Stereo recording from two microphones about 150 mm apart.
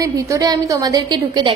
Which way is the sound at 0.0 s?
25° right (ahead or behind).